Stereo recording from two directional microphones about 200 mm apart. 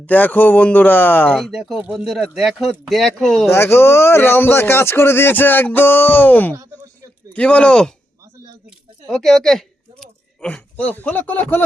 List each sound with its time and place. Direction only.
0.0 s speech: 10° left (ahead or behind)
3.5 s a man's voice: 10° left (ahead or behind)
9.0 s speech: centre (ahead or behind)